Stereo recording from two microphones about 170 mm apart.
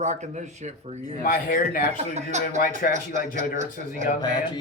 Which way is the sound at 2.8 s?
60° left (ahead or behind).